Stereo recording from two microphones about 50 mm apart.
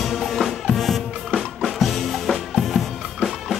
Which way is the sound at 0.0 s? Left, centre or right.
Centre.